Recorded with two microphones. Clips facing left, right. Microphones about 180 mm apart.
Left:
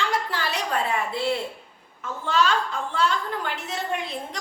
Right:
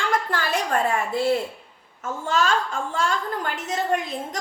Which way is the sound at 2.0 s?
45° right (ahead or behind).